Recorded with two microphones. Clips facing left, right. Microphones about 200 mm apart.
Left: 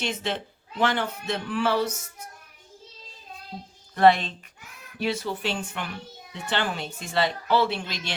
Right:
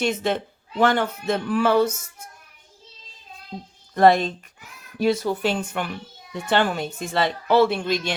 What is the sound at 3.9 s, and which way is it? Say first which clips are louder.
Speech: right 3 dB; 40° right (ahead or behind).